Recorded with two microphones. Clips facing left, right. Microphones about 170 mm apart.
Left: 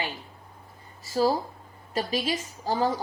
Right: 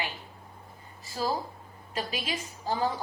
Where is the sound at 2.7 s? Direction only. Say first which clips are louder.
Left 4 dB; 40° left (ahead or behind).